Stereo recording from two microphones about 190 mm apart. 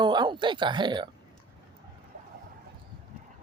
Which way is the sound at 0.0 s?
25° right (ahead or behind).